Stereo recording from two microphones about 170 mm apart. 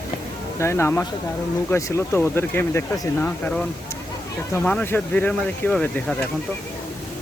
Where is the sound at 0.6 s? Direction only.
15° left (ahead or behind).